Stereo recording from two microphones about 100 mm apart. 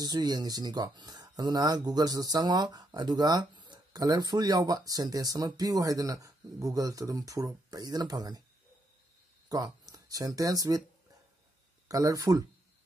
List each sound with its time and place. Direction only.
0.0 s speech: 40° right (ahead or behind)
9.5 s speech: 35° right (ahead or behind)
11.9 s speech: 35° right (ahead or behind)